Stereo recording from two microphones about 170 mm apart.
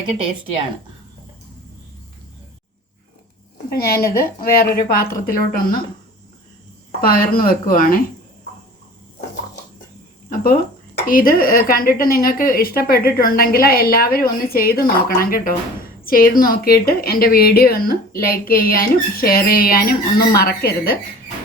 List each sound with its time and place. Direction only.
3.7 s a woman's voice: 65° left (ahead or behind)
7.0 s a woman's voice: 60° left (ahead or behind)
11.0 s a woman's voice: 55° left (ahead or behind)